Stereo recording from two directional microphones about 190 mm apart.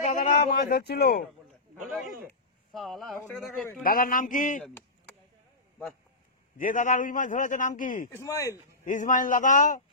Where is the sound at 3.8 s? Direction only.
50° left (ahead or behind).